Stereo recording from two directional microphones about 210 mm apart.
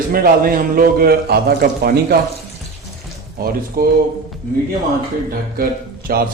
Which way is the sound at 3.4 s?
45° right (ahead or behind).